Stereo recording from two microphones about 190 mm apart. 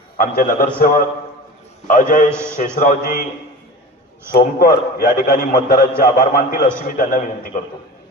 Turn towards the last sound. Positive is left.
turn(degrees=45)  # may be behind; listen again after turning